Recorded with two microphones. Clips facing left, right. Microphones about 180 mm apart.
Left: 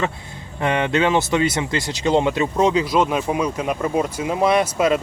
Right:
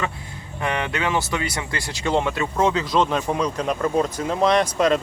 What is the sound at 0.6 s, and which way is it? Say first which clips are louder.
Speech: left 6 dB; 25° left (ahead or behind).